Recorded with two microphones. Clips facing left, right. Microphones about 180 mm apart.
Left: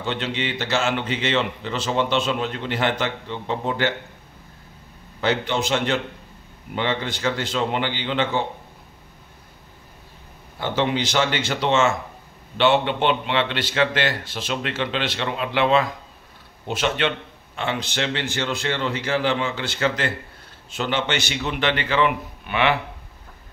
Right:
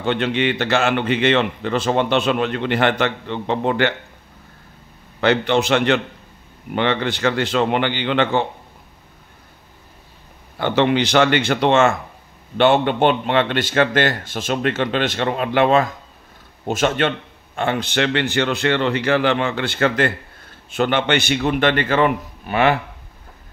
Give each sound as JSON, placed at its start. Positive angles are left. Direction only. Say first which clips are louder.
{"t": 0.0, "sound": "a man's voice", "louder": "right 7 dB", "side_deg": -60}
{"t": 5.2, "sound": "a man's voice", "louder": "right 6 dB", "side_deg": -65}
{"t": 10.6, "sound": "a man's voice", "louder": "right 6 dB", "side_deg": -65}